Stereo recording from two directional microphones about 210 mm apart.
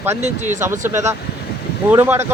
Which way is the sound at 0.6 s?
10° right (ahead or behind).